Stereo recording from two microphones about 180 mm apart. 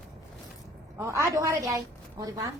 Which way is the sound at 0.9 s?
15° right (ahead or behind).